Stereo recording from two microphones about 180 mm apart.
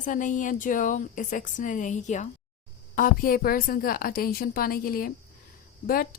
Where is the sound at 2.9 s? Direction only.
50° left (ahead or behind).